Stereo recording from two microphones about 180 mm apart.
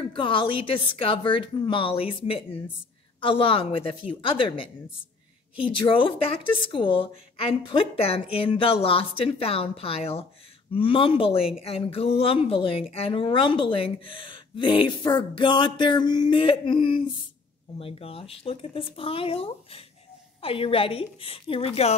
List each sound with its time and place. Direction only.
0.1 s a woman's voice: 30° left (ahead or behind)